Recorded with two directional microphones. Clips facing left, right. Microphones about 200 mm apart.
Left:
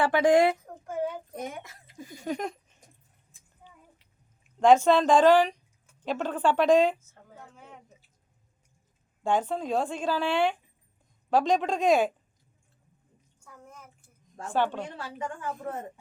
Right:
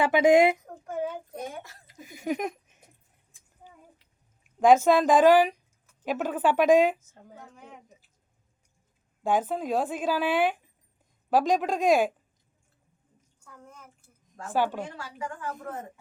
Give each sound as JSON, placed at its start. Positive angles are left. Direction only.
{"t": 0.1, "sound": "a woman's voice", "side_deg": -10}
{"t": 0.6, "sound": "child singing", "side_deg": 0}
{"t": 1.4, "sound": "speech", "side_deg": 20}
{"t": 2.2, "sound": "a sound", "side_deg": -15}
{"t": 4.6, "sound": "a woman's voice", "side_deg": -10}
{"t": 9.2, "sound": "a woman's voice", "side_deg": -5}
{"t": 13.4, "sound": "bathtub", "side_deg": 10}
{"t": 14.4, "sound": "a woman's voice", "side_deg": -5}